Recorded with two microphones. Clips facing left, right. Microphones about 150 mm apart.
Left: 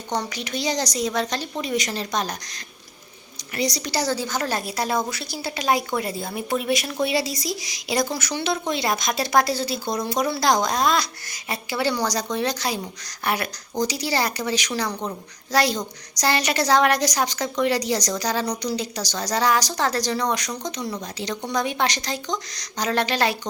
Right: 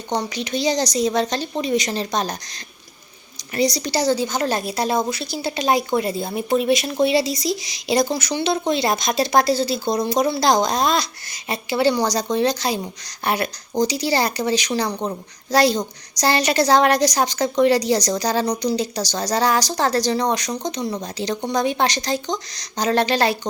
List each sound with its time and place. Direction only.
0.1 s a woman's voice: 20° right (ahead or behind)